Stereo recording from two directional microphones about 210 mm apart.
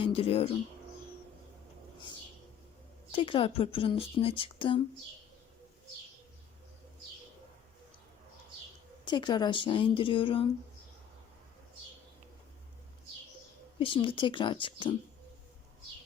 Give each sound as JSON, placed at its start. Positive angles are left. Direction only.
{"t": 0.0, "sound": "speech", "side_deg": 25}
{"t": 3.1, "sound": "a woman's voice", "side_deg": 25}
{"t": 9.0, "sound": "a woman's voice", "side_deg": 20}
{"t": 13.7, "sound": "a woman's voice", "side_deg": 25}